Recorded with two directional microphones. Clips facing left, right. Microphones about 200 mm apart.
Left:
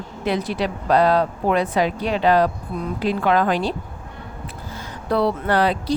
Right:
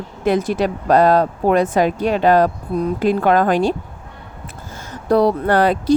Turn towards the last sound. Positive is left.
turn(degrees=-50)  # may be behind; listen again after turning